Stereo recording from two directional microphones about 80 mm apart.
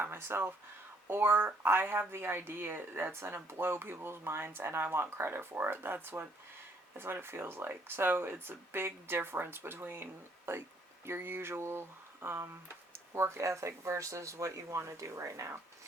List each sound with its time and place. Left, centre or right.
0.0 s speech: right